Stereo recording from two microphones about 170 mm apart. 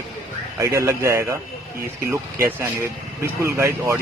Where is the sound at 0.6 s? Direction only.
15° right (ahead or behind).